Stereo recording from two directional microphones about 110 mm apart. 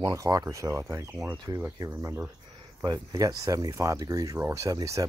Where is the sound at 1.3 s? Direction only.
40° right (ahead or behind).